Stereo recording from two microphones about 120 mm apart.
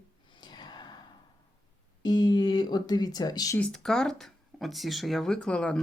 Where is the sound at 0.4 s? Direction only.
35° left (ahead or behind).